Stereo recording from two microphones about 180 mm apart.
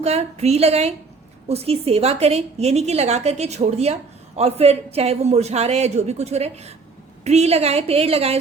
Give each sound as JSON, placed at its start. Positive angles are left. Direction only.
{"t": 0.0, "sound": "a woman's voice", "side_deg": -35}